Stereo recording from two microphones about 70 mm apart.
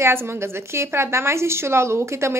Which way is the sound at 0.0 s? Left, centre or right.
Right.